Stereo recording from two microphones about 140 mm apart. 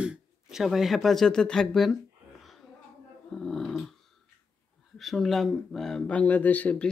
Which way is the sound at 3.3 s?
5° left (ahead or behind).